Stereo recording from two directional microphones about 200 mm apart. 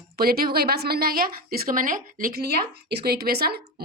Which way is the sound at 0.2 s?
50° right (ahead or behind).